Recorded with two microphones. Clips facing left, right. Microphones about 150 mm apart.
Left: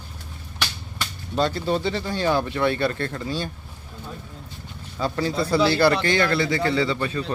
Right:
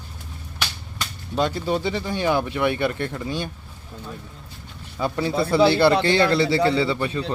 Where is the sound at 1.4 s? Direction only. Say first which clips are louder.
Even; 10° right (ahead or behind).